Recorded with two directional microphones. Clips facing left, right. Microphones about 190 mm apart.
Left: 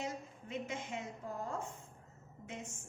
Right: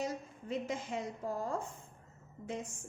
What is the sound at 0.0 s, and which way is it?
A woman's voice, 35° right (ahead or behind).